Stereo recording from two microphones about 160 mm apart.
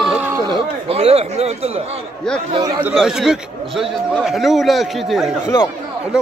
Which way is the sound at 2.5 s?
25° right (ahead or behind).